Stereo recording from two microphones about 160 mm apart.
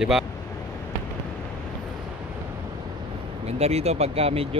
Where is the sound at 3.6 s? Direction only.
40° right (ahead or behind).